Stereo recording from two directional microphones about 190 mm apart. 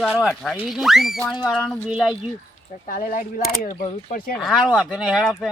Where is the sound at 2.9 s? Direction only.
45° left (ahead or behind).